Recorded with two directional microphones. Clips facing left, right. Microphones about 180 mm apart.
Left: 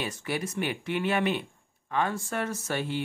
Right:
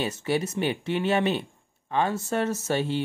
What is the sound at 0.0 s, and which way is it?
Speech, 25° right (ahead or behind).